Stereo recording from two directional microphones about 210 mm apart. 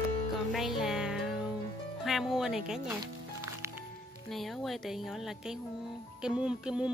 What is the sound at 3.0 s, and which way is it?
Music, 15° right (ahead or behind).